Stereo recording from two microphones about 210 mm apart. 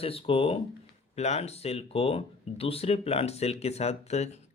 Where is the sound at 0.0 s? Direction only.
25° left (ahead or behind).